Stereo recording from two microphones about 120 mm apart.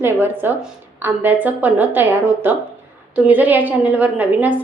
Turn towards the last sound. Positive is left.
turn(degrees=-10)  # may be behind; listen again after turning